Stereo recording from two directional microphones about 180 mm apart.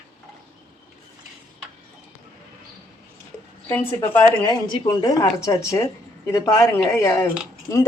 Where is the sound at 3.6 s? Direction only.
10° left (ahead or behind).